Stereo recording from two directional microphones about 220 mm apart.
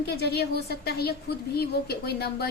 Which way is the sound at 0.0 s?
45° left (ahead or behind).